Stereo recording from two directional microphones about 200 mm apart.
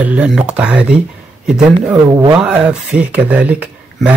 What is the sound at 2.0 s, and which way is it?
Speech, 15° right (ahead or behind).